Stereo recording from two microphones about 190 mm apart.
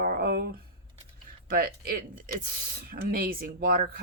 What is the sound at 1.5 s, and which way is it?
Speech, 50° right (ahead or behind).